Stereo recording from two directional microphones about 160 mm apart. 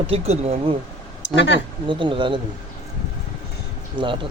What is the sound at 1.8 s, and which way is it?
Speech, 30° right (ahead or behind).